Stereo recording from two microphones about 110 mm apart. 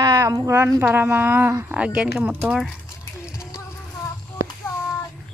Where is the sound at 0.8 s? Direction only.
20° right (ahead or behind).